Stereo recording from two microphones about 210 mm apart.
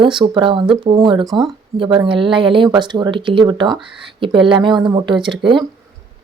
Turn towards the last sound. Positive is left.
turn(degrees=-25)  # may be behind; listen again after turning